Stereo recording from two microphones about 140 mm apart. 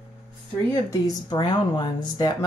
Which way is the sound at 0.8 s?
30° left (ahead or behind).